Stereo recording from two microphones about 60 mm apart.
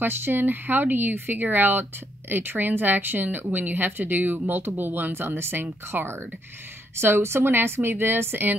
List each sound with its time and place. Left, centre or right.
0.0 s speech: right